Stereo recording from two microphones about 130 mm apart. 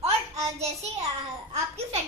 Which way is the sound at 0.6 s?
55° right (ahead or behind).